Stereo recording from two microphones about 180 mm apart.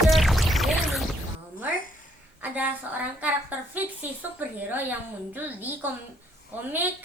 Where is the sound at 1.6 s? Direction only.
50° left (ahead or behind).